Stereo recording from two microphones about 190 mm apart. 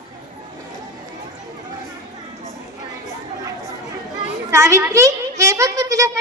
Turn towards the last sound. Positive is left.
turn(degrees=-15)  # may be behind; listen again after turning